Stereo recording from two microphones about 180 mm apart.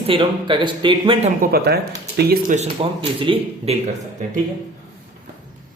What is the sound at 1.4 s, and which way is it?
Speech, 60° right (ahead or behind).